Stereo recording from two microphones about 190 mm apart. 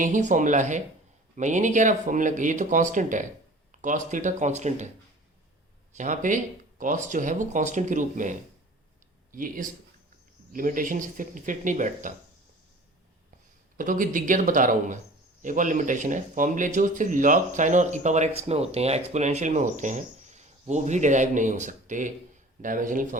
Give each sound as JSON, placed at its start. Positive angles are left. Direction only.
{"t": 0.0, "sound": "speech", "side_deg": -40}
{"t": 6.0, "sound": "speech", "side_deg": -40}
{"t": 13.7, "sound": "speech", "side_deg": -45}